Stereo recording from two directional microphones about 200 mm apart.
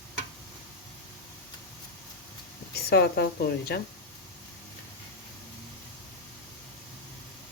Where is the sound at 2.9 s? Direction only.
55° left (ahead or behind).